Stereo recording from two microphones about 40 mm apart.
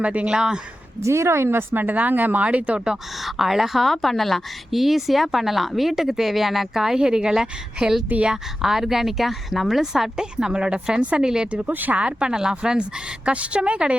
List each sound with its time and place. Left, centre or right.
0.0 s a woman's voice: right
0.3 s speech: centre
1.3 s speech: right
1.8 s speech: right
2.4 s a woman's voice: right
3.2 s speech: centre
7.0 s a woman's voice: centre
11.7 s speech: right
11.9 s speech: right
13.2 s a woman's voice: right